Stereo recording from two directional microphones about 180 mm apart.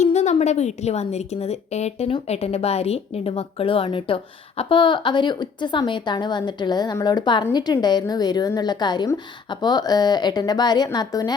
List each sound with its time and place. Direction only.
0.0 s a woman's voice: 40° left (ahead or behind); by 11.3 s 20° left (ahead or behind)